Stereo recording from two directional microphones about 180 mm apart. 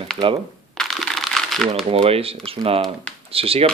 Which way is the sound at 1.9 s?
35° right (ahead or behind).